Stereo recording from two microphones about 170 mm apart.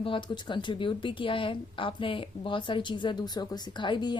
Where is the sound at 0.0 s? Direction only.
30° left (ahead or behind).